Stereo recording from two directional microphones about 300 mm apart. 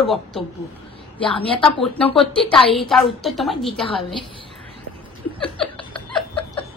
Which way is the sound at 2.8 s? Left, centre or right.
Centre.